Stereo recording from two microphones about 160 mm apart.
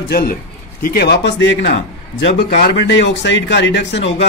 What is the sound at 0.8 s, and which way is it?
Speech, 85° left.